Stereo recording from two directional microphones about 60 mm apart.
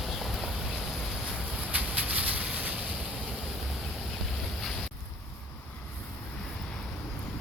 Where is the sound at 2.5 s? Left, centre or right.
Centre.